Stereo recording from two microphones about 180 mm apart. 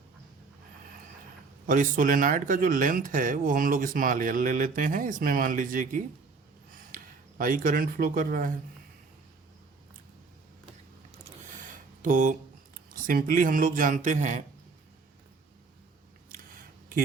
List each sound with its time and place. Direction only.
1.6 s speech: 50° right (ahead or behind)
12.0 s speech: 50° right (ahead or behind)